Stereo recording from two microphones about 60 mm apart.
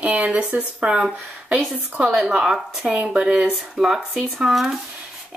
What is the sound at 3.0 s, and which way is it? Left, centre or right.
Speech, centre.